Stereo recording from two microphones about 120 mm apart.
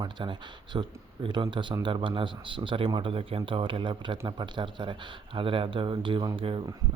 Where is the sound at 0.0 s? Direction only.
40° right (ahead or behind).